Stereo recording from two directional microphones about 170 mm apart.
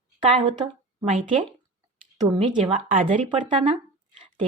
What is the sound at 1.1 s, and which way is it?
Speech, 50° right (ahead or behind).